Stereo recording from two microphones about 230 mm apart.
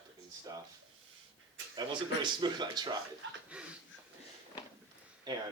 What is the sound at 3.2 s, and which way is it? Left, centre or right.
Speech, right.